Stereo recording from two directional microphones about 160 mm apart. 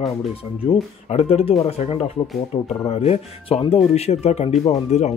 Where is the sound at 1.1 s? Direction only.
40° left (ahead or behind).